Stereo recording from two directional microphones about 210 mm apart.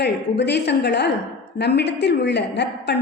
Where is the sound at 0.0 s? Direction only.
55° left (ahead or behind).